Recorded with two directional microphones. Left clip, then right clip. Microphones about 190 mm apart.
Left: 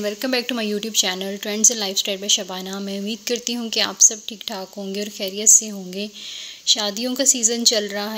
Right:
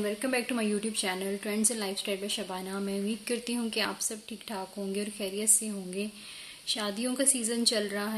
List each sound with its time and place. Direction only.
0.0 s a woman's voice: 50° left (ahead or behind)